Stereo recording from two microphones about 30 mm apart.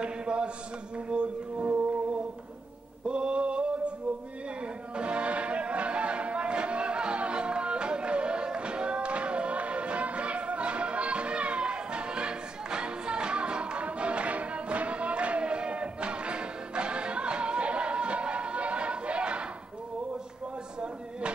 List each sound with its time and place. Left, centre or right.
0.0 s a sound: right
0.9 s speech: right
3.1 s mantra: right
4.9 s music: right